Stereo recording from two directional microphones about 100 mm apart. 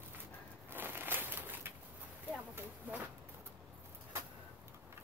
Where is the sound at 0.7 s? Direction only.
20° right (ahead or behind).